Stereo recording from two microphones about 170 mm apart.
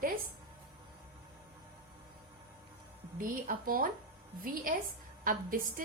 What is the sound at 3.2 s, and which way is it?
A woman's voice, 55° right (ahead or behind).